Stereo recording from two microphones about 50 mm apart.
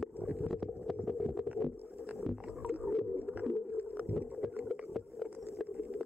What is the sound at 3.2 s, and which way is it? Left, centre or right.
Whale vocalization, right.